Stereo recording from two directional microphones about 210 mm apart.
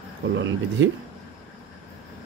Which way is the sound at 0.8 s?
65° right (ahead or behind).